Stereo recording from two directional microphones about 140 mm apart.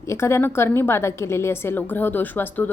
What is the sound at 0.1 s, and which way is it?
A woman's voice, 20° left (ahead or behind).